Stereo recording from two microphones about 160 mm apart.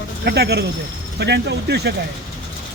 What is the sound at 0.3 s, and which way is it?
Speech, 90° right.